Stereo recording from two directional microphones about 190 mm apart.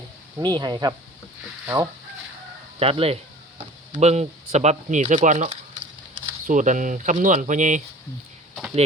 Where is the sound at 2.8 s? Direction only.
30° right (ahead or behind).